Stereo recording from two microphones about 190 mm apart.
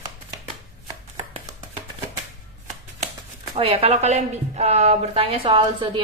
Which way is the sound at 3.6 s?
30° right (ahead or behind).